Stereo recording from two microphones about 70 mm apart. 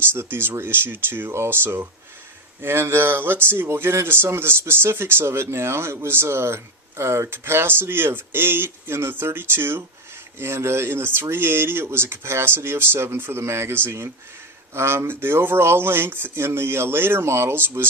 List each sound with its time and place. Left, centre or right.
0.1 s speech: right